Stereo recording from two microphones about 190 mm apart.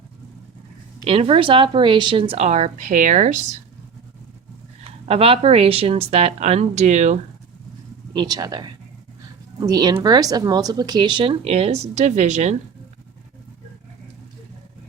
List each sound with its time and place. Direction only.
1.0 s speech: 30° right (ahead or behind)
4.8 s speech: 30° right (ahead or behind)
8.1 s a woman's voice: 20° right (ahead or behind); by 12.5 s 40° right (ahead or behind)